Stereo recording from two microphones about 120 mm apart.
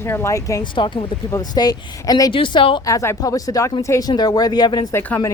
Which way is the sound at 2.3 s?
45° left (ahead or behind).